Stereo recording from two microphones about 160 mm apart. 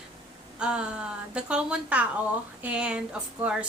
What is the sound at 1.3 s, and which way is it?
A woman's voice, 5° right (ahead or behind).